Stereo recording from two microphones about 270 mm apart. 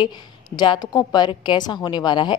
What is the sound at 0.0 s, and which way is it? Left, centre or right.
A woman's voice, centre.